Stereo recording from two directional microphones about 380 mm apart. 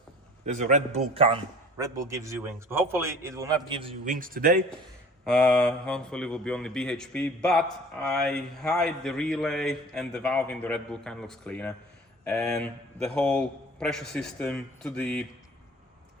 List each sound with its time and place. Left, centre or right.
0.4 s a man's voice: centre
5.2 s speech: centre